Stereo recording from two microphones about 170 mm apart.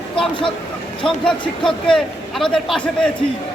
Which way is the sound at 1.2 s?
5° left (ahead or behind).